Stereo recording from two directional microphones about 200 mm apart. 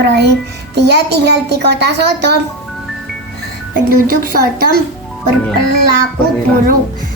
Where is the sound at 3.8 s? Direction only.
45° right (ahead or behind).